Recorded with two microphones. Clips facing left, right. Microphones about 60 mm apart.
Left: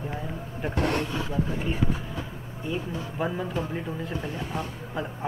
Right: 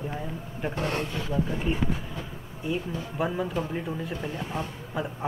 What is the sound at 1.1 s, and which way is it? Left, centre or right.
Speech, left.